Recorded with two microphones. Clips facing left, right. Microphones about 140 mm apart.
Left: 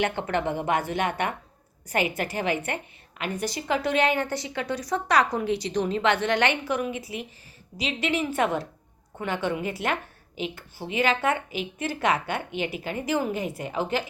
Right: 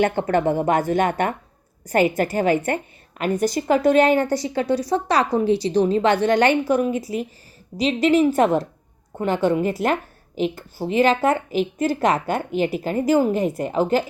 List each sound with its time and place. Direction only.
0.0 s a woman's voice: 45° right (ahead or behind)